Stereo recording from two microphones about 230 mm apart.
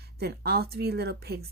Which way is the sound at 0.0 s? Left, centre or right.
Right.